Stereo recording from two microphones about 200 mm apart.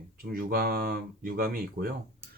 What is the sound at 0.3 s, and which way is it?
Speech, 45° right (ahead or behind).